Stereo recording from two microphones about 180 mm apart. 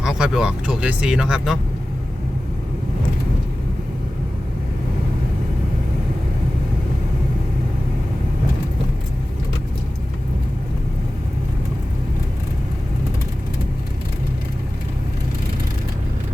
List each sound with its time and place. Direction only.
0.0 s speech: 5° right (ahead or behind)